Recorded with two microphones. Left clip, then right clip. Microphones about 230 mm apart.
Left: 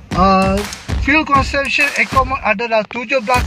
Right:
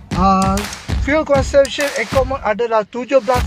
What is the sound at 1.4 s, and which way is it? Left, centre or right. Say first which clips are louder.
Speech: right 1 dB; centre.